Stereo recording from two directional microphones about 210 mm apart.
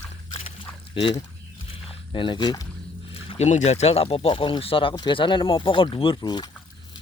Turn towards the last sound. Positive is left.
turn(degrees=20)  # may be behind; listen again after turning